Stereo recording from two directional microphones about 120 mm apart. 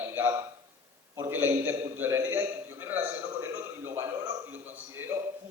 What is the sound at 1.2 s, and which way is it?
A man's voice, 20° right (ahead or behind).